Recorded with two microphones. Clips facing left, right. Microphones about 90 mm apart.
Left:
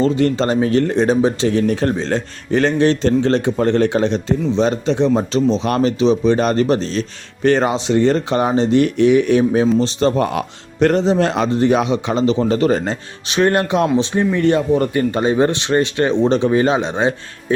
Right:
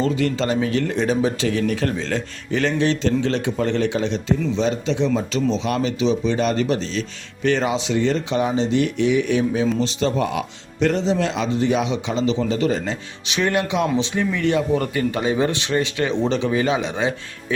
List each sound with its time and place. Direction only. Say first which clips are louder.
0.0 s speech: left 5 dB; 35° left (ahead or behind)